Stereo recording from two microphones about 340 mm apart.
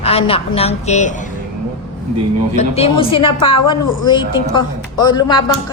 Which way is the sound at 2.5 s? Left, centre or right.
Centre.